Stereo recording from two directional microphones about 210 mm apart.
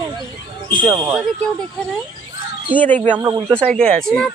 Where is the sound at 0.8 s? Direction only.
10° right (ahead or behind).